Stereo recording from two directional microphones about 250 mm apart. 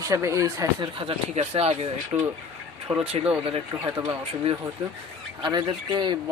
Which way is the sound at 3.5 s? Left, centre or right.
Centre.